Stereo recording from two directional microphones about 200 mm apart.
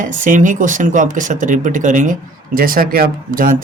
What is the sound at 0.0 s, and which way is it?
Speech, 40° right (ahead or behind).